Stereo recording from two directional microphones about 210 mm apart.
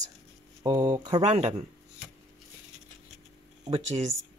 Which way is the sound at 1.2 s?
30° right (ahead or behind).